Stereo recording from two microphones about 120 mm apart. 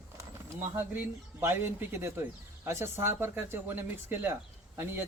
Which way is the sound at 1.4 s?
20° right (ahead or behind).